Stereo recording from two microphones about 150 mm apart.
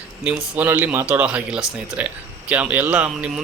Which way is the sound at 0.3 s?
10° right (ahead or behind).